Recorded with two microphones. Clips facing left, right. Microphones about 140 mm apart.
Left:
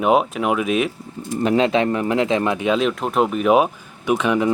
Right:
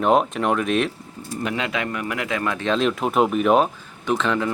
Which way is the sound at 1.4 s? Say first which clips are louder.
Left 9 dB; 30° left (ahead or behind).